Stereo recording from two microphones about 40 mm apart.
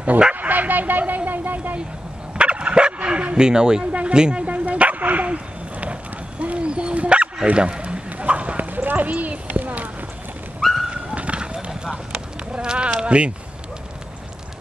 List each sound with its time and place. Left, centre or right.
0.3 s dog: right
2.3 s dog: right
3.9 s speech: right
4.5 s dog: right
7.5 s a sound: right
8.6 s a sound: right
10.6 s dog: centre
11.1 s clip-clop: right
12.5 s a sound: right
13.0 s speech: right